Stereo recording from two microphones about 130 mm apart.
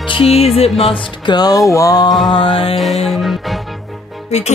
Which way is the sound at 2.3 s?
40° left (ahead or behind).